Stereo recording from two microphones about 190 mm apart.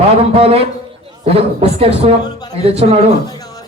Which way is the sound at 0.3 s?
30° right (ahead or behind).